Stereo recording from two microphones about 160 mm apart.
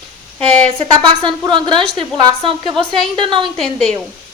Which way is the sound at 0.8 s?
30° right (ahead or behind).